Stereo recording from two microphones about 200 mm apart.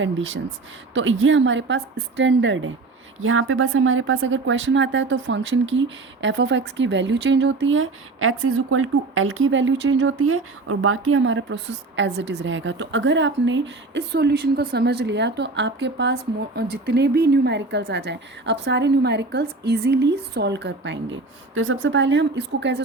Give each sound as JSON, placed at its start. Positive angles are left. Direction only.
{"t": 0.0, "sound": "a woman's voice", "side_deg": -70}
{"t": 3.2, "sound": "a woman's voice", "side_deg": -90}